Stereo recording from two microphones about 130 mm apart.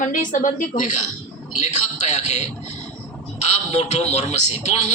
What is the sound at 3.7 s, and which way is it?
Speech, 60° left (ahead or behind).